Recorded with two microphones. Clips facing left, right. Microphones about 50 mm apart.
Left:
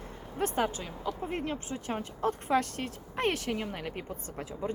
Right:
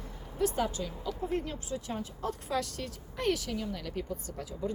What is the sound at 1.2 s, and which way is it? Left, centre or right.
Speech, left.